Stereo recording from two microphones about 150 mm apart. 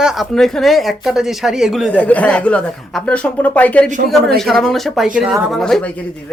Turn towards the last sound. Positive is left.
turn(degrees=5)  # may be behind; listen again after turning